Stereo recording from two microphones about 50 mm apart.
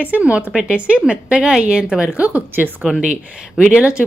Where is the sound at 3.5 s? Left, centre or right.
Centre.